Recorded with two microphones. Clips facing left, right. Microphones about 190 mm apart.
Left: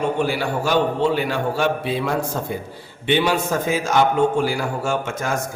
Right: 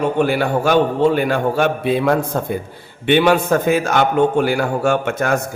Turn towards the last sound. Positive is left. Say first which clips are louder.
# right 6 dB
turn(degrees=-65)  # may be behind; listen again after turning